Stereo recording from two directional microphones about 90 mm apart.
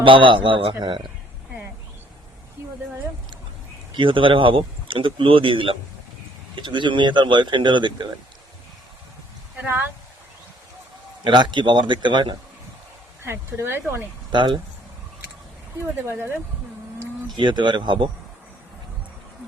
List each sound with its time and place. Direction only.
0.0 s speech: 70° right (ahead or behind)
3.9 s speech: 70° right (ahead or behind)
6.6 s speech: 60° right (ahead or behind)
9.6 s speech: 25° right (ahead or behind)
11.2 s speech: 55° right (ahead or behind)
13.2 s speech: 30° right (ahead or behind)
14.3 s speech: 60° right (ahead or behind)
16.0 s speech: 25° right (ahead or behind)
17.3 s speech: 60° right (ahead or behind)